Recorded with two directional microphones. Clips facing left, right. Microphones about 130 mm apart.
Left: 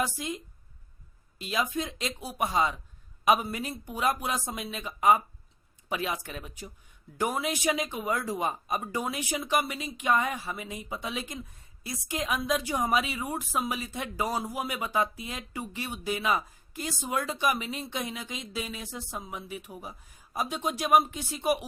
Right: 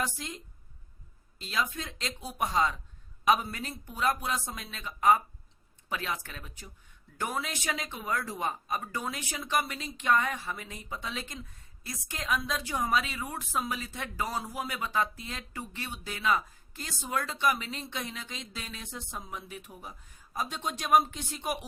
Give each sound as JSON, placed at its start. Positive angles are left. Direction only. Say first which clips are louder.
{"t": 0.0, "sound": "speech", "louder": "left 4 dB", "side_deg": 10}